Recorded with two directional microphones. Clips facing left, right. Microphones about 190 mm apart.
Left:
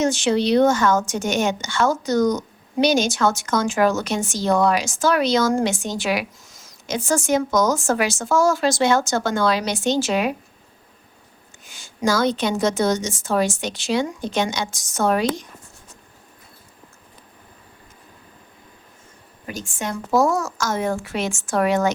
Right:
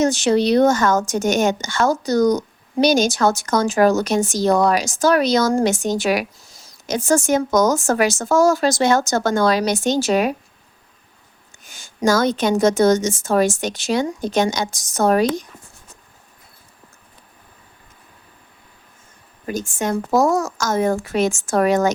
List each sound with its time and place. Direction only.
0.0 s speech: 40° right (ahead or behind)
11.6 s a woman's voice: 45° right (ahead or behind)
19.5 s speech: 45° right (ahead or behind)